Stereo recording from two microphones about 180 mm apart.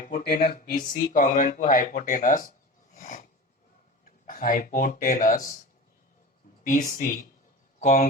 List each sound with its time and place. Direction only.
0.0 s speech: 55° left (ahead or behind)
2.9 s a sound: 45° left (ahead or behind)
4.3 s speech: 50° left (ahead or behind)
6.7 s speech: 50° left (ahead or behind)